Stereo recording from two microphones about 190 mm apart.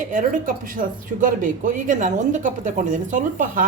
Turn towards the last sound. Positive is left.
turn(degrees=-40)  # may be behind; listen again after turning